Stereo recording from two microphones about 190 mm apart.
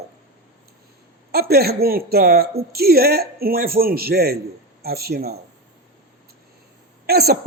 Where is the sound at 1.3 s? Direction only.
55° right (ahead or behind).